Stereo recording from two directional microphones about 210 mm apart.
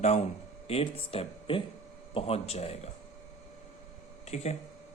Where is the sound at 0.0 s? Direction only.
30° left (ahead or behind).